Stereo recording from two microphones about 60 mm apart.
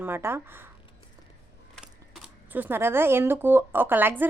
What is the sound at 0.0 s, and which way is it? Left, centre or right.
Speech, right.